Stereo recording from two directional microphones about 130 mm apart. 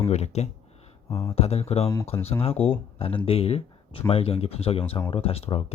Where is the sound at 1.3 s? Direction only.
50° left (ahead or behind).